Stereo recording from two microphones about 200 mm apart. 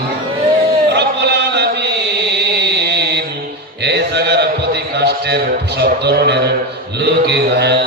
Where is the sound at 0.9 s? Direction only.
55° right (ahead or behind).